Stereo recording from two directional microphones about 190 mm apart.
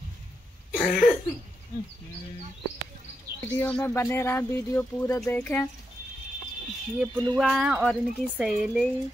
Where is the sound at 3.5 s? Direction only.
10° left (ahead or behind).